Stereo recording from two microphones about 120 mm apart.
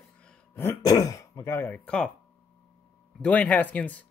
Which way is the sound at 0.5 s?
25° left (ahead or behind).